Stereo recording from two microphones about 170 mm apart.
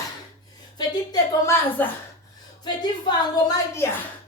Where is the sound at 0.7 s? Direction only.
25° left (ahead or behind).